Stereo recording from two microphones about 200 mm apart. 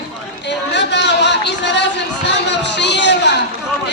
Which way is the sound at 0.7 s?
60° left (ahead or behind).